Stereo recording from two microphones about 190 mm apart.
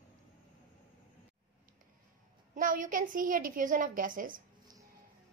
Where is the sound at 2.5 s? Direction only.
45° right (ahead or behind).